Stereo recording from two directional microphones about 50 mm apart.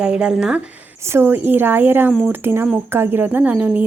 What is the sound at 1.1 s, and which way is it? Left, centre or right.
A woman's voice, right.